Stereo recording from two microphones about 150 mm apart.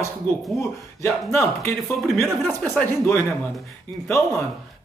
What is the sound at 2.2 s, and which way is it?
Speech, centre (ahead or behind).